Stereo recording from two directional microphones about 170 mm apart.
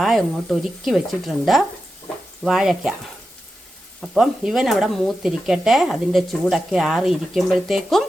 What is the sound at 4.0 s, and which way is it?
Speech, centre (ahead or behind).